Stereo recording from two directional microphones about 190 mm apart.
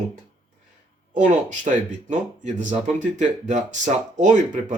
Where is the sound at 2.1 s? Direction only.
40° right (ahead or behind).